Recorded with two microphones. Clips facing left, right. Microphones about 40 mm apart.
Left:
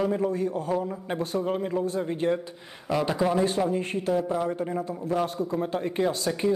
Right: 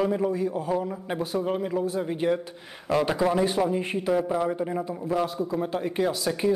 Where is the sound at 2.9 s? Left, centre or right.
Centre.